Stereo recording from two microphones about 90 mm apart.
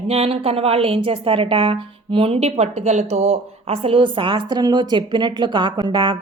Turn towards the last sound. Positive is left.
turn(degrees=-60)  # may be behind; listen again after turning